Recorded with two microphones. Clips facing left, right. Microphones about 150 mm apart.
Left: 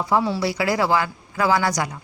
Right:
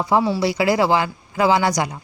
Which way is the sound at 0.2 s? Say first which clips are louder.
Right 3 dB; 10° right (ahead or behind).